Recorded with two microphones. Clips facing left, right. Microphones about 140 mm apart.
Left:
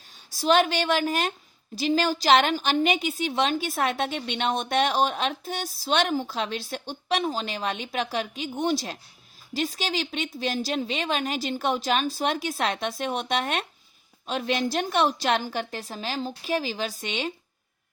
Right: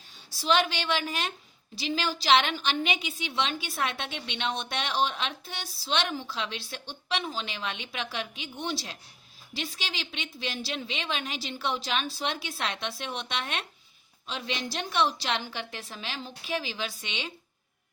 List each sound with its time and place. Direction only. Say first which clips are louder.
0.3 s a woman's voice: left 5 dB; 45° left (ahead or behind)